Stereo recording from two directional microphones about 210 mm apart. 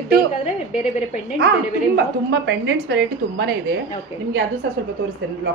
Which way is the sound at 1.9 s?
55° right (ahead or behind).